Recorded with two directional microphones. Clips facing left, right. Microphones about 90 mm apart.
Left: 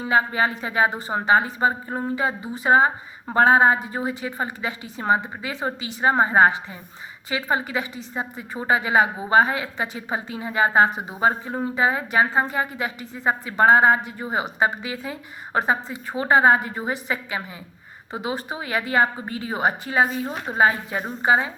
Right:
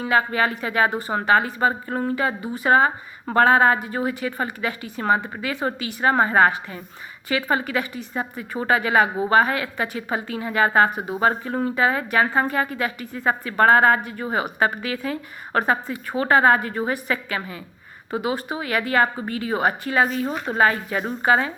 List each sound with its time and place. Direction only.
0.0 s speech: 25° left (ahead or behind)